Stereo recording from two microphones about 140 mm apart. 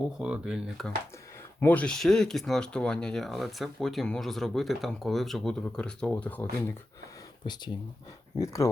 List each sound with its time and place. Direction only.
0.2 s speech: 5° right (ahead or behind)
1.6 s speech: 10° left (ahead or behind)
8.4 s speech: 20° left (ahead or behind)